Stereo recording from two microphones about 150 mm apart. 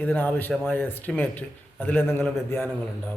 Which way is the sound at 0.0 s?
10° left (ahead or behind).